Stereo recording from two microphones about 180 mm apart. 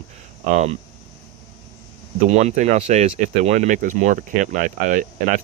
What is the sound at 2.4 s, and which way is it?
Speech, 40° right (ahead or behind).